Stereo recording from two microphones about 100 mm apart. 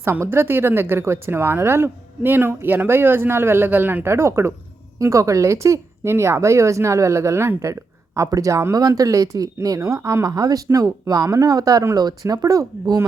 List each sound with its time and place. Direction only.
0.0 s a woman's voice: 25° right (ahead or behind)